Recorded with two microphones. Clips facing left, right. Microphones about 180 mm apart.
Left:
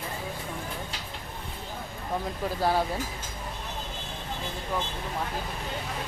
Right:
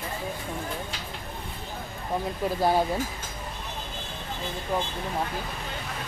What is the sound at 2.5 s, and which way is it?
Speech, 15° right (ahead or behind).